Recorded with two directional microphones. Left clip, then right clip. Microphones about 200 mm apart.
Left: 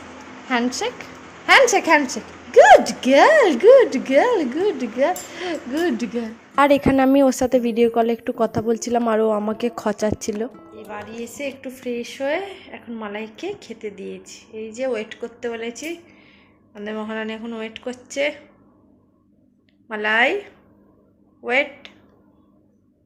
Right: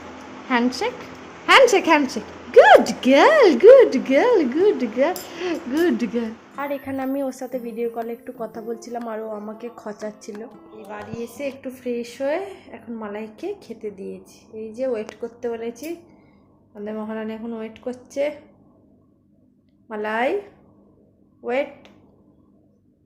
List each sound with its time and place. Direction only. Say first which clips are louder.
0.4 s speech: right 1 dB; 5° left (ahead or behind)
6.6 s a woman's voice: left 12 dB; 50° left (ahead or behind)
10.5 s speech: left 2 dB; centre (ahead or behind)
19.9 s speech: left 4 dB; 5° right (ahead or behind)
21.4 s speech: left 4 dB; 5° right (ahead or behind)